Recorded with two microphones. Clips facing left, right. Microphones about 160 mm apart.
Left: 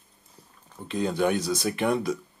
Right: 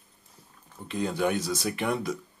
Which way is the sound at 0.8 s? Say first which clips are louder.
Left 3 dB; 30° left (ahead or behind).